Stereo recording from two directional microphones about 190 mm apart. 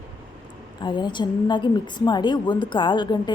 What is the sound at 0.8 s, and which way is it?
A woman's voice, 25° left (ahead or behind).